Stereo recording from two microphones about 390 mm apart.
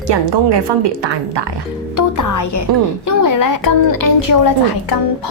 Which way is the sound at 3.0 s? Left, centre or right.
Left.